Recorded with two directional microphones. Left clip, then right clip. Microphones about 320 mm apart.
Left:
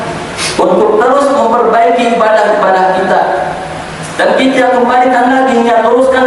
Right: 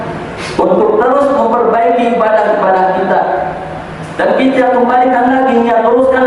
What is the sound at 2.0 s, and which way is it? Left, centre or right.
Speech, centre.